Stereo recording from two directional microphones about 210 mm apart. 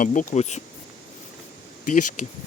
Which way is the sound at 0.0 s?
40° left (ahead or behind).